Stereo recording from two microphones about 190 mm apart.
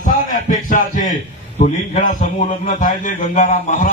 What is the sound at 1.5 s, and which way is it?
Speech, 40° left (ahead or behind).